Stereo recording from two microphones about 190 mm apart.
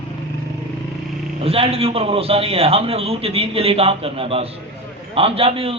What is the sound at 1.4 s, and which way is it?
A man's voice, 30° right (ahead or behind).